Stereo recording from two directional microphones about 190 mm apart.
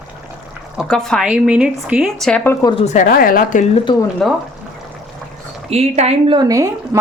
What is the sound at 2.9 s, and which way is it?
Speech, 50° left (ahead or behind).